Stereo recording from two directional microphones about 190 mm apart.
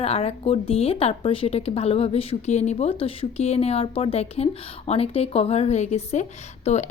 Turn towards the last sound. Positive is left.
turn(degrees=35)  # may be behind; listen again after turning